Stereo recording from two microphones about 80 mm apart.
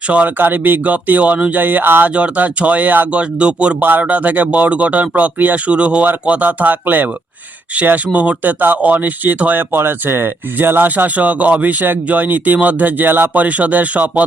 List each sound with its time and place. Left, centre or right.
0.1 s speech: right